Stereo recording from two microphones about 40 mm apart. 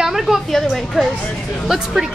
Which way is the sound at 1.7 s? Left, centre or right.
Centre.